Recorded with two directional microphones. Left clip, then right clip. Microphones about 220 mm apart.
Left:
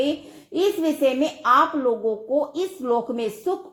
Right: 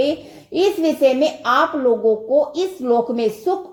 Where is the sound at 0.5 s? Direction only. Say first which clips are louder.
Right 4 dB; 15° left (ahead or behind).